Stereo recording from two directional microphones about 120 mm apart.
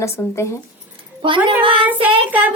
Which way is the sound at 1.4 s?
50° right (ahead or behind).